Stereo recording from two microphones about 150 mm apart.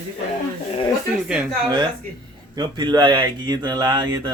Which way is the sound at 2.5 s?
30° right (ahead or behind).